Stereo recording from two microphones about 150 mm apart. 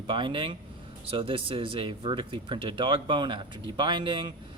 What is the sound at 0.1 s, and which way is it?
Speech, 35° right (ahead or behind).